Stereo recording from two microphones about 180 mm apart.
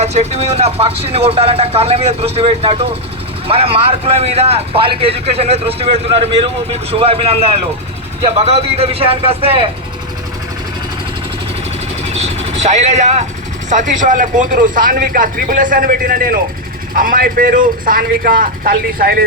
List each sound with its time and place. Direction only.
0.0 s a man's voice: 35° right (ahead or behind)
8.4 s a man's voice: 35° right (ahead or behind)
12.1 s vehicle: 35° right (ahead or behind)
13.7 s speech: 45° right (ahead or behind)